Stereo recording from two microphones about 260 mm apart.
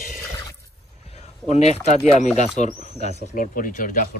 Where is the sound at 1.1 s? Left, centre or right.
Left.